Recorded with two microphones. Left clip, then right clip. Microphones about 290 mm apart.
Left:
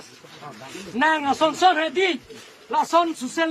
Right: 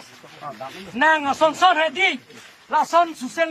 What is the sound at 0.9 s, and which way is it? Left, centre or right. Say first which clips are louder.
A man's voice: right 2 dB; centre.